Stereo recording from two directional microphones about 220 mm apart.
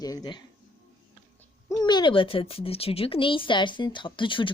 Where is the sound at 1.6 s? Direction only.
20° left (ahead or behind).